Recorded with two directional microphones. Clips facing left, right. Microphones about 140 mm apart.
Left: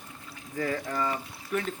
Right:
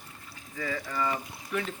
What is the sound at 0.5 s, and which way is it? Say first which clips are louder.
Speech: left 4 dB; 50° left (ahead or behind).